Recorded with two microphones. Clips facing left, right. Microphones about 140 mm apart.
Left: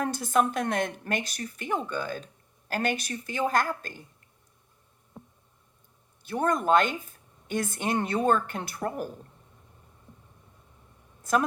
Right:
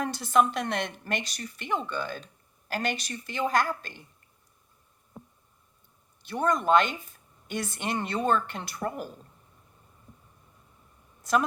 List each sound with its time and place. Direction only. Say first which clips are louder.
0.0 s a woman's voice: right 1 dB; 45° left (ahead or behind)
6.2 s a woman's voice: even; 50° left (ahead or behind)
11.2 s a sound: even; 45° left (ahead or behind)